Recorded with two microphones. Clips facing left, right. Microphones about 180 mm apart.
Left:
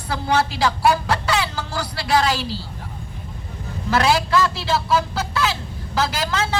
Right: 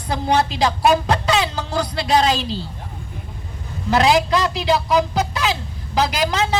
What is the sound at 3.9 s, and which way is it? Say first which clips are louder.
A man's voice: right 3 dB; 20° right (ahead or behind).